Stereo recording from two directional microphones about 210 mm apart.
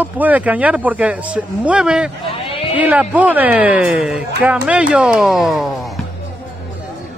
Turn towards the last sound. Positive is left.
turn(degrees=0)  # may be behind; listen again after turning